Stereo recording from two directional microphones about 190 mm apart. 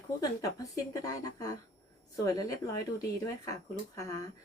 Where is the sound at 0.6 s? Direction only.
20° left (ahead or behind).